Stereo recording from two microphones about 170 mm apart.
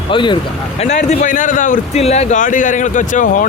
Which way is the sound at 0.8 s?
40° left (ahead or behind).